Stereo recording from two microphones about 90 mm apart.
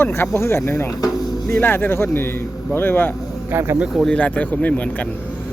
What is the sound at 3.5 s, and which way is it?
Speech, 30° right (ahead or behind).